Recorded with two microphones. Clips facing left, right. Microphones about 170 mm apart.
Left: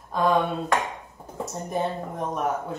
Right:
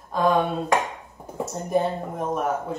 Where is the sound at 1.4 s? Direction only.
Centre (ahead or behind).